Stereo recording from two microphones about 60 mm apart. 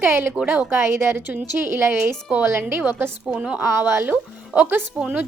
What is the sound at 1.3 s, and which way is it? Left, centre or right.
A woman's voice, right.